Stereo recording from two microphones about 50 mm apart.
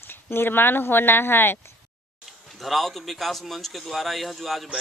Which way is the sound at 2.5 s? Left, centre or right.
Centre.